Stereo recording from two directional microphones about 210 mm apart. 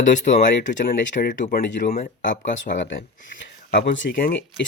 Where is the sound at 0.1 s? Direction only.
35° left (ahead or behind).